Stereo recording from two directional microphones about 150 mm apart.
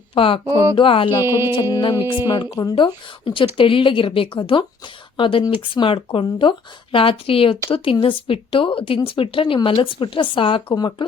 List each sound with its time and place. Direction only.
0.1 s speech: 35° left (ahead or behind)
1.2 s music: 15° right (ahead or behind)
1.7 s speech: 30° left (ahead or behind)